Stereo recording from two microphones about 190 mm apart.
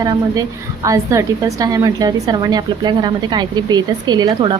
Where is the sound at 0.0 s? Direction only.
20° right (ahead or behind).